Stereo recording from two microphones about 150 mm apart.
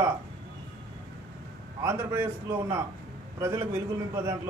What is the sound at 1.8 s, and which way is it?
A man's voice, 15° right (ahead or behind).